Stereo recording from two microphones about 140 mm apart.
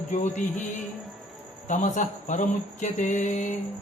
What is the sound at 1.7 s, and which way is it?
Mantra, 60° left (ahead or behind).